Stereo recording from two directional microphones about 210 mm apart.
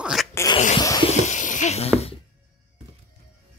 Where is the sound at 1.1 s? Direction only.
35° left (ahead or behind).